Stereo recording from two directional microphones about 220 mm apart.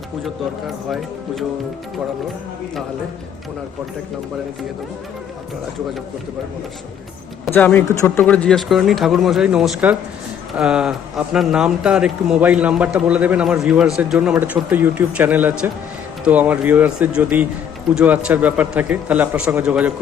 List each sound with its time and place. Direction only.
7.4 s a man's voice: 5° left (ahead or behind)